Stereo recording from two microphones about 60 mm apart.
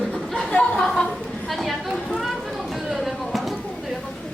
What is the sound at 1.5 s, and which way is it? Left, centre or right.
Speech, centre.